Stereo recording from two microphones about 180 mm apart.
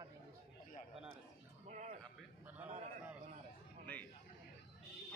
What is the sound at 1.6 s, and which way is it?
Speech, 40° right (ahead or behind).